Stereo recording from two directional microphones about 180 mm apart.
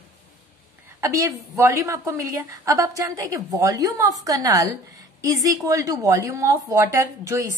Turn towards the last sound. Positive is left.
turn(degrees=-15)  # may be behind; listen again after turning